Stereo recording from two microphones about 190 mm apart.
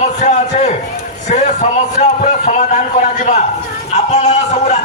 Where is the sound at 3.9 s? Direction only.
35° left (ahead or behind).